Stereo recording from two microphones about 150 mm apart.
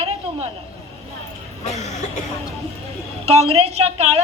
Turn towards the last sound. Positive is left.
turn(degrees=-45)  # may be behind; listen again after turning